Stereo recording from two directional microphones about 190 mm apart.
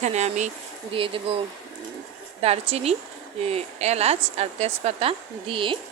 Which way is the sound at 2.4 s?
35° right (ahead or behind).